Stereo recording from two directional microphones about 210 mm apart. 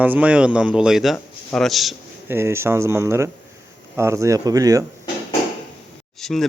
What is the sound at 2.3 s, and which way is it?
Speech, 10° right (ahead or behind).